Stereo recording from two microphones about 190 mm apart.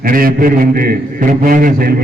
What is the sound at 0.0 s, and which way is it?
A man's voice, 50° right (ahead or behind).